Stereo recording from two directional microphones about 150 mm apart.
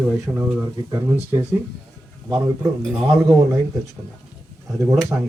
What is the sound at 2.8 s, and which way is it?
Speech, centre (ahead or behind).